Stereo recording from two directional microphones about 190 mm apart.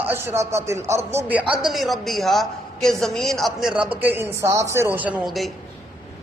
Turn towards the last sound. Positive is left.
turn(degrees=0)  # may be behind; listen again after turning